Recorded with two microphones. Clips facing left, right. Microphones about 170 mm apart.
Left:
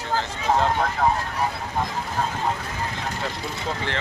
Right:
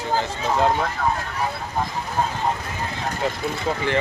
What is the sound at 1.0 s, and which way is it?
Speech, 30° left (ahead or behind).